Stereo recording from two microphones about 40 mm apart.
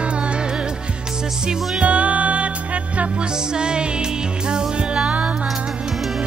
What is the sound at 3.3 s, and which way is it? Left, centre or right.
Music, centre.